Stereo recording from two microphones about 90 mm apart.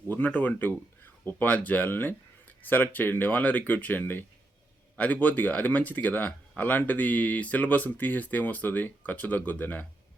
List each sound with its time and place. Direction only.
0.1 s speech: 15° left (ahead or behind)